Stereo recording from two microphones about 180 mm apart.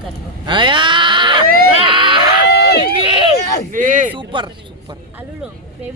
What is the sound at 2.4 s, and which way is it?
Run, 65° left (ahead or behind).